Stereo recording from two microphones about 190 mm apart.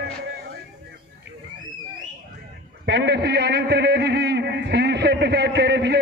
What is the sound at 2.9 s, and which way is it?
A man's voice, 65° right (ahead or behind).